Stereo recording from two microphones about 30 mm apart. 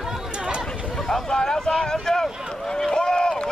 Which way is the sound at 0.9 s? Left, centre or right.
Centre.